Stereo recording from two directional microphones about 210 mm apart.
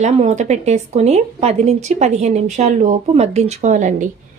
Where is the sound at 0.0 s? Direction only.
35° right (ahead or behind).